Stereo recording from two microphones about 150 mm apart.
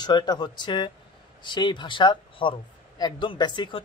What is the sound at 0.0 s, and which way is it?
Speech, 30° left (ahead or behind).